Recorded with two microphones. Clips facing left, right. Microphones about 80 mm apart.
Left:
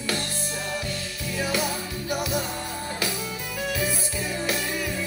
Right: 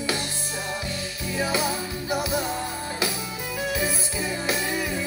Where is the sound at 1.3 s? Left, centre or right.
Centre.